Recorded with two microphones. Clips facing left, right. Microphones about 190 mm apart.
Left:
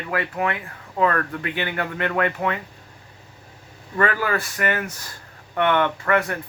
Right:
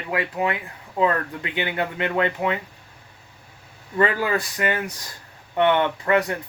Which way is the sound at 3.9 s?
20° right (ahead or behind).